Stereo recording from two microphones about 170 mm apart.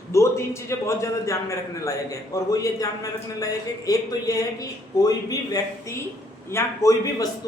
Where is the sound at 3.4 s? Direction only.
20° left (ahead or behind).